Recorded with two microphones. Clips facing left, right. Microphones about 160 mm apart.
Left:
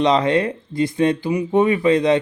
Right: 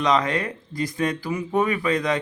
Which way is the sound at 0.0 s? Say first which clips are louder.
Left 5 dB; 30° left (ahead or behind).